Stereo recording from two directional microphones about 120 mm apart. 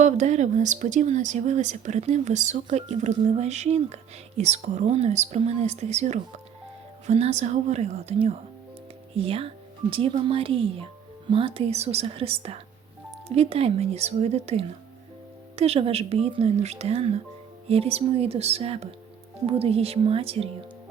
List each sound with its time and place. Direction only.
0.0 s speech: 80° right
9.1 s speech: 50° right (ahead or behind)